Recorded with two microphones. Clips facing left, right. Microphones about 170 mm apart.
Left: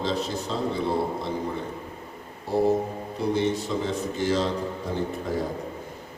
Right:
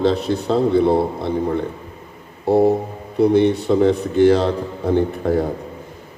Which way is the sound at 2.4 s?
60° right (ahead or behind).